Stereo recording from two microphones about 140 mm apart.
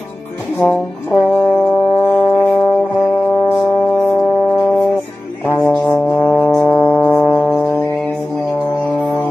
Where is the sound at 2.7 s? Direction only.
15° left (ahead or behind).